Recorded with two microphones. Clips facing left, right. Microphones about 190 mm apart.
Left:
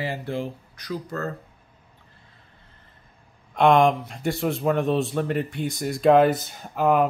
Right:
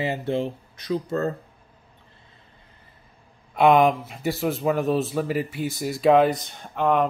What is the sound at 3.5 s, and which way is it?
A man's voice, 5° right (ahead or behind).